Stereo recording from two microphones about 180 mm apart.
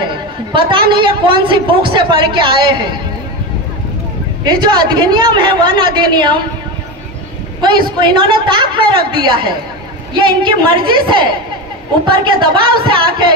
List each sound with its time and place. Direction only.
0.0 s a woman's voice: 25° right (ahead or behind)
4.5 s a woman's voice: 25° right (ahead or behind)
8.0 s a woman's voice: 25° right (ahead or behind)